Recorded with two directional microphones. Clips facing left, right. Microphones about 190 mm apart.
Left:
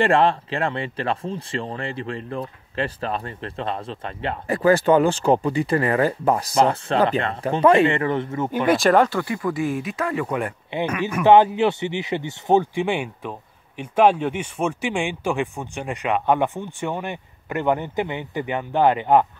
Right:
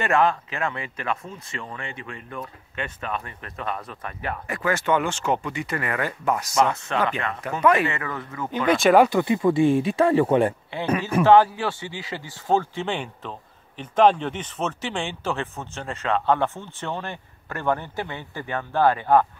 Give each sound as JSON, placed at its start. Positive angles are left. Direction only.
{"t": 0.0, "sound": "speech", "side_deg": 30}
{"t": 8.5, "sound": "speech", "side_deg": 10}
{"t": 9.2, "sound": "speech", "side_deg": -25}
{"t": 11.2, "sound": "speech", "side_deg": 20}